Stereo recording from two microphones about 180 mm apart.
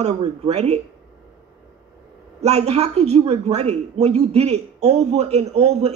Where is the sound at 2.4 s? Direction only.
35° right (ahead or behind).